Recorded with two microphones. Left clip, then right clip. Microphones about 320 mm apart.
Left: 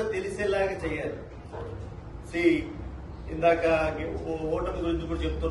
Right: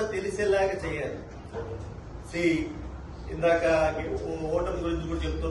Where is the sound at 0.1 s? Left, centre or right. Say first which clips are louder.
Right 2 dB; centre.